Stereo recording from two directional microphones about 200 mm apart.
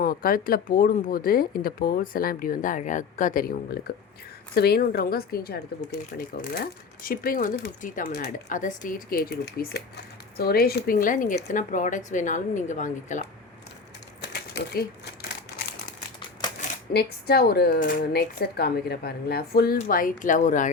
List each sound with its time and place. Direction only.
0.0 s speech: 45° left (ahead or behind)
14.2 s a sound: 55° left (ahead or behind)
16.9 s speech: 50° left (ahead or behind)